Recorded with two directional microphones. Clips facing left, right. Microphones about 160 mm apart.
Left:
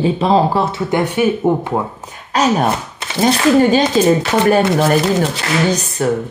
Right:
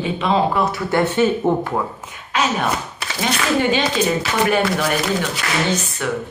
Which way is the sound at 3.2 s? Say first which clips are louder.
Left 8 dB; 40° left (ahead or behind).